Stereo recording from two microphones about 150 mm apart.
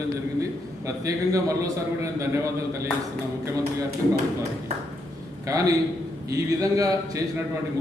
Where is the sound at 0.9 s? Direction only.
20° right (ahead or behind).